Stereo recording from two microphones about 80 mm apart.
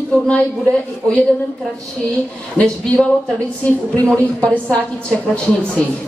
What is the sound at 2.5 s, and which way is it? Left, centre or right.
A woman's voice, centre.